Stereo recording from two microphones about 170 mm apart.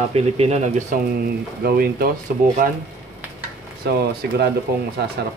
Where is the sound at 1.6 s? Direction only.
60° right (ahead or behind).